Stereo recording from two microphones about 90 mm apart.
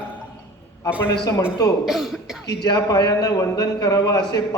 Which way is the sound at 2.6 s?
50° left (ahead or behind).